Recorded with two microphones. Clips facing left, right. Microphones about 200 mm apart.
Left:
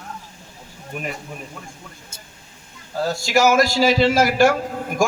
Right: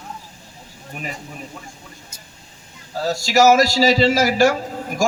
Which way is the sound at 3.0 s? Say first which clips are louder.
Right 3 dB; 55° left (ahead or behind).